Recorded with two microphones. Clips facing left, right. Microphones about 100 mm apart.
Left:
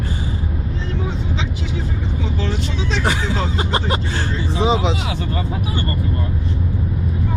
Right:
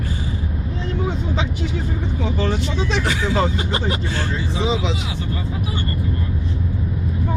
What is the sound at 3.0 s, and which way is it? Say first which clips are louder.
Speech: even; 35° left (ahead or behind).